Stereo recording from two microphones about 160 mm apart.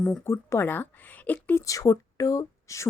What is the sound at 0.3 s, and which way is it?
Speech, 15° left (ahead or behind).